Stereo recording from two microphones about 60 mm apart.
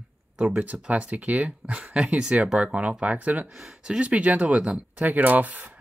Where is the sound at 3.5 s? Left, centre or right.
Centre; by 5.7 s right.